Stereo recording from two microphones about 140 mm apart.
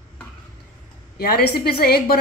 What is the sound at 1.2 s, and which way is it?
Speech, 90° left.